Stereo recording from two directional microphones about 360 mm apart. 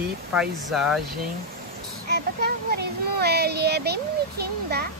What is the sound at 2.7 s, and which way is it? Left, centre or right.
Speech, right.